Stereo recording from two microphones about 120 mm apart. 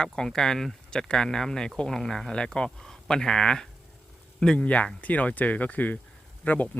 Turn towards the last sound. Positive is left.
turn(degrees=15)  # may be behind; listen again after turning